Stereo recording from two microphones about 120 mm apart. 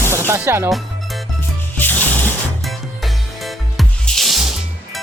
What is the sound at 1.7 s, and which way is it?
Music, 15° left (ahead or behind).